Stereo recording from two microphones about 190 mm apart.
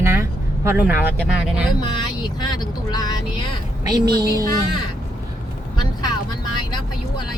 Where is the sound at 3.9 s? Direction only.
20° right (ahead or behind).